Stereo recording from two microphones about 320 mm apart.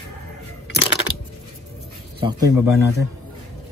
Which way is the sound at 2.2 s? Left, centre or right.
Centre.